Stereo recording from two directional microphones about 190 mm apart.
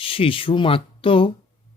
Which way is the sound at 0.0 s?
30° left (ahead or behind).